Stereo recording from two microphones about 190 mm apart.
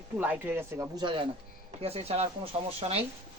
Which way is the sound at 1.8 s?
30° right (ahead or behind).